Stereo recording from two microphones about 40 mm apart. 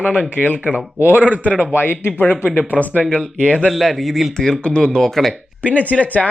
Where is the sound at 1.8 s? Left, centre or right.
Left.